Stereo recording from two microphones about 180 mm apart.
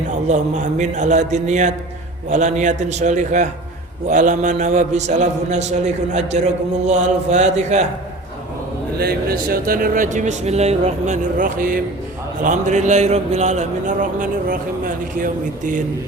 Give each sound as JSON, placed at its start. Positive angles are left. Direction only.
{"t": 0.3, "sound": "a man's voice", "side_deg": -40}
{"t": 9.0, "sound": "a man's voice", "side_deg": -55}